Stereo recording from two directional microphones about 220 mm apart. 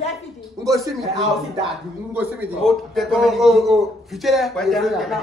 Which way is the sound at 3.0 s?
Centre (ahead or behind).